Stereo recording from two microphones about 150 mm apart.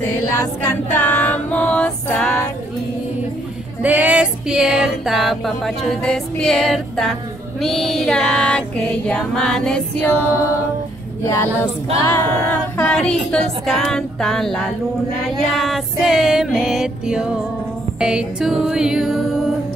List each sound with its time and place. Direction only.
0.4 s female singing: 15° left (ahead or behind)
3.8 s music: 10° right (ahead or behind); by 10.1 s 5° left (ahead or behind)
11.2 s a capella: 20° left (ahead or behind)
12.9 s music: 5° left (ahead or behind)